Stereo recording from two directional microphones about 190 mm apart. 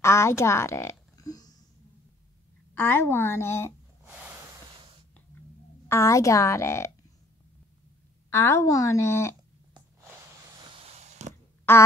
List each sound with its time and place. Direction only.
0.0 s a sound: 15° left (ahead or behind)
2.7 s a woman's voice: 10° left (ahead or behind)
4.0 s snort: 10° right (ahead or behind)
5.9 s a woman's voice: 15° left (ahead or behind)
8.3 s a woman's voice: 15° left (ahead or behind)
10.8 s a sound: 35° right (ahead or behind)
11.7 s a woman's voice: 10° left (ahead or behind)